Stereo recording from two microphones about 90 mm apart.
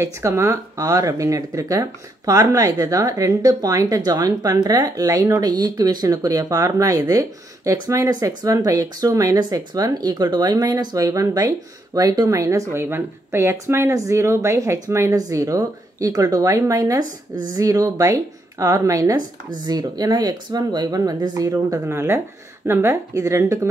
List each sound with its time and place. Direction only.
0.0 s speech: 30° right (ahead or behind)
21.8 s speech: 30° right (ahead or behind)